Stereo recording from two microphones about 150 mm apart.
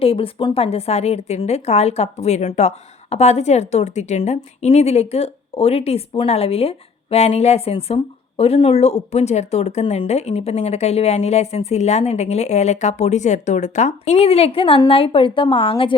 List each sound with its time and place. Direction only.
0.0 s a woman's voice: 40° left (ahead or behind)